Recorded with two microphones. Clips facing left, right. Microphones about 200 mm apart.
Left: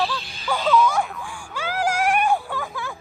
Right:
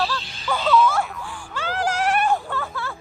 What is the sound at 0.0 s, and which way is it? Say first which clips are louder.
Music: even; centre (ahead or behind).